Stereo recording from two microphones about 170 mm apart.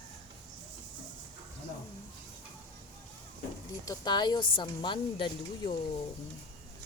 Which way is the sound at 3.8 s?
25° left (ahead or behind).